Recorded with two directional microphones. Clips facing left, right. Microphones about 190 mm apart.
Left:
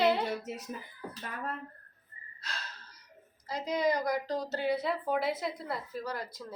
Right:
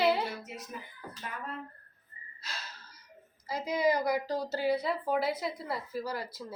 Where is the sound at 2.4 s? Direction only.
5° right (ahead or behind).